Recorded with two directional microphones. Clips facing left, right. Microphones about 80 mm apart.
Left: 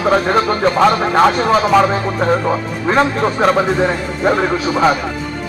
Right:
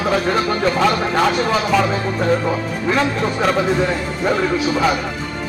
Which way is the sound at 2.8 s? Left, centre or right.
Left.